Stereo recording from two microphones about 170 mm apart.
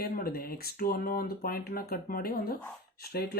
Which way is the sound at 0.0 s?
65° left (ahead or behind).